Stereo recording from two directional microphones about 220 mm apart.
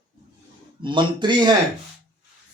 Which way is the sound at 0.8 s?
20° right (ahead or behind).